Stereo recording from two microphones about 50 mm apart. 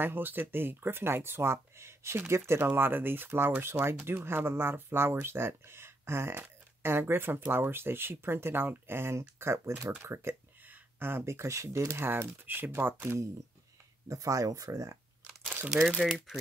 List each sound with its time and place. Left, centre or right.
0.0 s speech: right
2.6 s speech: right
10.7 s a sound: right
11.2 s speech: right
12.0 s speech: right
14.0 s speech: right
16.0 s speech: centre